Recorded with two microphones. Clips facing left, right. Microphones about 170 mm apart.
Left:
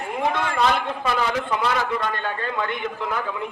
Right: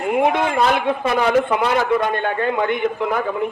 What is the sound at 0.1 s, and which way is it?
A man's voice, 60° right (ahead or behind).